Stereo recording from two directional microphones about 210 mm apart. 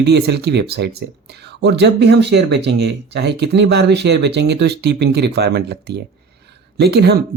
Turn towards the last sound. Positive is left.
turn(degrees=-50)  # may be behind; listen again after turning